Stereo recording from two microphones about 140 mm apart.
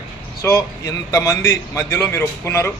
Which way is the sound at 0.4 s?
20° left (ahead or behind).